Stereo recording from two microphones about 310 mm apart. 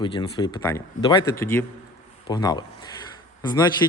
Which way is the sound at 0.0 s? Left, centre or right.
Centre.